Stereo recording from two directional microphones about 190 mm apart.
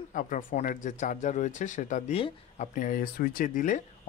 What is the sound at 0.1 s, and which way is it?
Speech, 45° left (ahead or behind).